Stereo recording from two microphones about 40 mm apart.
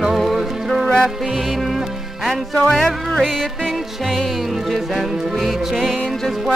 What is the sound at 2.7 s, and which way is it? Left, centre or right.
Music, centre.